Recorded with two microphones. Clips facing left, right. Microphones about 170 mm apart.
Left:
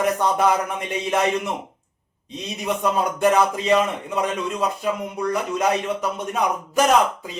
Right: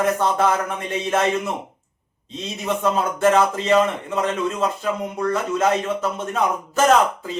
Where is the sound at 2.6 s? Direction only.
15° left (ahead or behind).